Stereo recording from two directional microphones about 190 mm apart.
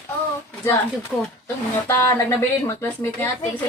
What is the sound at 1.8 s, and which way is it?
Speech, 15° left (ahead or behind).